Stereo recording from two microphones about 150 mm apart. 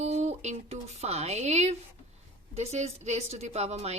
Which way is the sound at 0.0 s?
45° right (ahead or behind).